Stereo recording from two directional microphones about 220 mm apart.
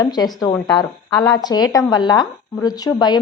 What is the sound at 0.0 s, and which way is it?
A woman's voice, 20° left (ahead or behind).